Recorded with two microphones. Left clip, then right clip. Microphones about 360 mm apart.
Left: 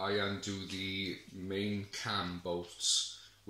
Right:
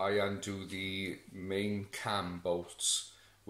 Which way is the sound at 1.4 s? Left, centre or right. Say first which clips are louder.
Right 2 dB; centre.